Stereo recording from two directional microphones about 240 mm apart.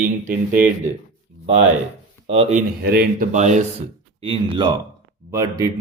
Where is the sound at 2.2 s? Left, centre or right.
Right.